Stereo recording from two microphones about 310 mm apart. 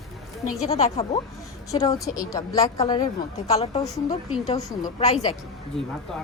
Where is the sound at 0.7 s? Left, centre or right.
Centre.